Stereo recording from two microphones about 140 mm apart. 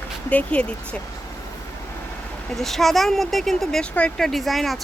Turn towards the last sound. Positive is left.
turn(degrees=0)  # may be behind; listen again after turning